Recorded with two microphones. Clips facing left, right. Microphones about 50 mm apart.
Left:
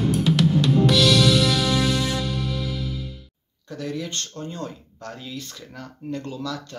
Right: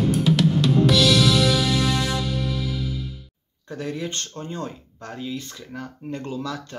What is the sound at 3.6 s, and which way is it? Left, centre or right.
Speech, right.